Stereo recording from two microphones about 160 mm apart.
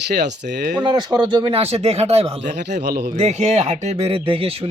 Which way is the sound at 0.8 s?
25° right (ahead or behind).